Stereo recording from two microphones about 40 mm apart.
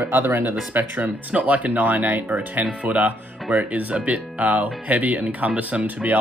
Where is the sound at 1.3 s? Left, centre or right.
Right.